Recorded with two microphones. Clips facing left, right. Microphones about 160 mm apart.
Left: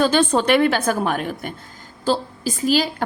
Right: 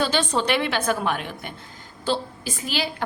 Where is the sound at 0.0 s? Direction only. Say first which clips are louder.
Left 6 dB; 50° left (ahead or behind).